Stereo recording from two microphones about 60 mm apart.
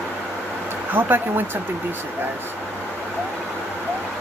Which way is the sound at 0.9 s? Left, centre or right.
Right.